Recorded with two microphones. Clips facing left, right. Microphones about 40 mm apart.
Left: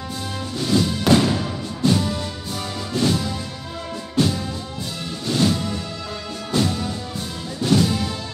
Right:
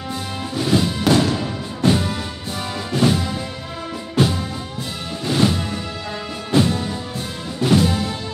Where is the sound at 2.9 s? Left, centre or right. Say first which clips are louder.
Right 3 dB; right.